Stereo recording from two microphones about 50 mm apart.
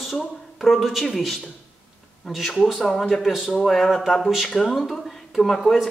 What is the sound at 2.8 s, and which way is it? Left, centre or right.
Speech, centre.